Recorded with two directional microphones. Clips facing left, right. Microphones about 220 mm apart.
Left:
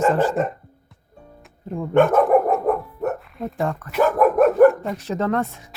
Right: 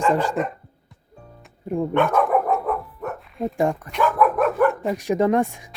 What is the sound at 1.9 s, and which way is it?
Dog, 45° left (ahead or behind).